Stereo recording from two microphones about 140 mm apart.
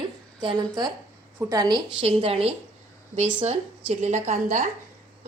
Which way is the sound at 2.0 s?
45° right (ahead or behind).